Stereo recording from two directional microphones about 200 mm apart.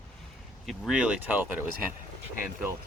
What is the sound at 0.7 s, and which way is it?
Speech, 5° right (ahead or behind).